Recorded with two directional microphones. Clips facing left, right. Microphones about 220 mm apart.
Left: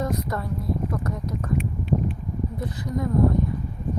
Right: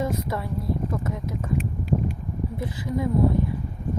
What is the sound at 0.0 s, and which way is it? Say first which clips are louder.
Speech: even; 5° right (ahead or behind).